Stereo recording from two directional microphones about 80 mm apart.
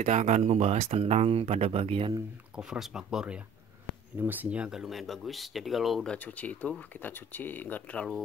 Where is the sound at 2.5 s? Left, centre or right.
Centre.